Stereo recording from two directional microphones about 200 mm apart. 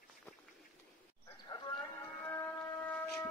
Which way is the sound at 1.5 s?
20° left (ahead or behind).